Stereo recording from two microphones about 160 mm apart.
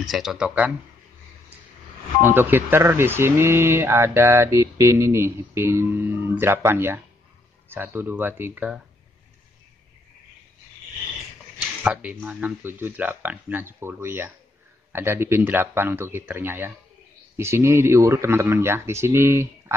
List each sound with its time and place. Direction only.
0.0 s speech: centre (ahead or behind)
2.2 s speech: 15° right (ahead or behind)
11.8 s speech: 10° right (ahead or behind)